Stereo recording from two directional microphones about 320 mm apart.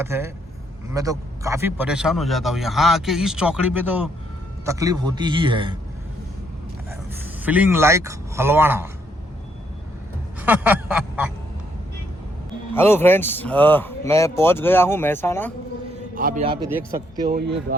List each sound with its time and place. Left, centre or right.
0.0 s speech: centre
7.1 s speech: centre
10.4 s a sound: centre
12.7 s speech: centre
16.1 s speech: right
17.2 s speech: right